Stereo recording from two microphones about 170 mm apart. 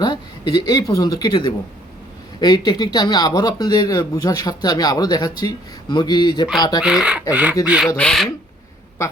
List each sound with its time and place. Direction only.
0.0 s speech: 25° left (ahead or behind)
6.8 s speech: 5° right (ahead or behind)
7.9 s speech: 5° left (ahead or behind)